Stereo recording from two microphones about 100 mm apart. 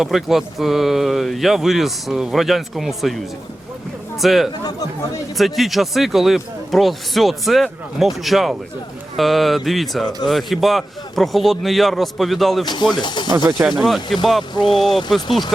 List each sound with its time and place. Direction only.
0.0 s speech: 5° right (ahead or behind)
12.6 s speech: 50° left (ahead or behind)
13.7 s speech: centre (ahead or behind)
14.5 s speech: 50° left (ahead or behind)
15.1 s speech: centre (ahead or behind)